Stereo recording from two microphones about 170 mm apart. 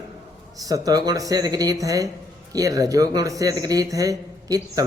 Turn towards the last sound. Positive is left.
turn(degrees=-20)  # may be behind; listen again after turning